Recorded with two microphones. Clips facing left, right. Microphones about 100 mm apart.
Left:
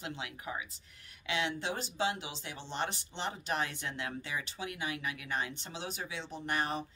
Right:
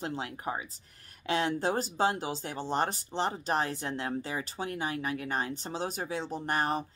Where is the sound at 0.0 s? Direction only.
40° right (ahead or behind).